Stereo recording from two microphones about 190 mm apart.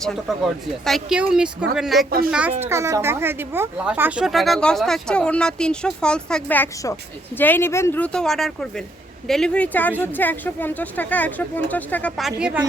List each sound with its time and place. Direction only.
0.0 s speech: centre (ahead or behind)
2.0 s speech: 50° right (ahead or behind)
2.3 s a child's voice: 10° right (ahead or behind)